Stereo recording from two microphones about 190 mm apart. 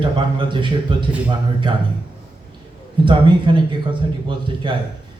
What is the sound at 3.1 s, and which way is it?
A man's voice, 25° right (ahead or behind).